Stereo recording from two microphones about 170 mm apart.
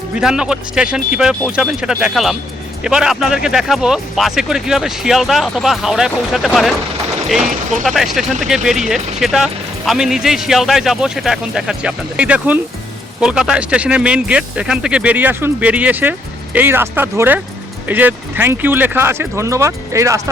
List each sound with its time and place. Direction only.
0.2 s speech: 5° right (ahead or behind)
7.9 s speech: centre (ahead or behind); by 20.2 s 20° right (ahead or behind)